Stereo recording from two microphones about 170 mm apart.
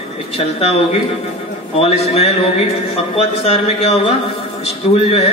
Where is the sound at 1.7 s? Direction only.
35° left (ahead or behind).